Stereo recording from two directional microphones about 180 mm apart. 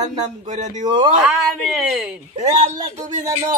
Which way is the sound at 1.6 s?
Centre (ahead or behind).